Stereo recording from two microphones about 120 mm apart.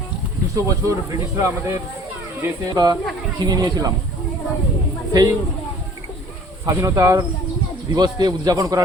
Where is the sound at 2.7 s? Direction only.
30° right (ahead or behind).